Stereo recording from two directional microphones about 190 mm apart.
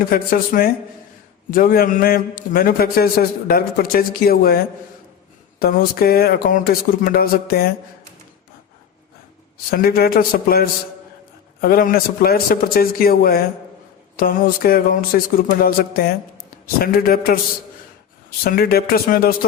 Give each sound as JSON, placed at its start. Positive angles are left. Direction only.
{"t": 0.1, "sound": "a man's voice", "side_deg": 50}
{"t": 9.6, "sound": "a man's voice", "side_deg": 50}
{"t": 18.4, "sound": "a man's voice", "side_deg": 50}